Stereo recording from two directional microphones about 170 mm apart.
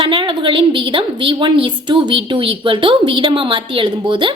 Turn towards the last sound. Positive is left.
turn(degrees=-30)  # may be behind; listen again after turning